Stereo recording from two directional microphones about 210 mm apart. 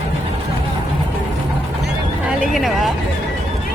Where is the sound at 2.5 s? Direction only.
Centre (ahead or behind).